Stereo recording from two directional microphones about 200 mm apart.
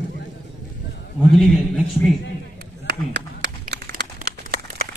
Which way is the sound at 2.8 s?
55° right (ahead or behind).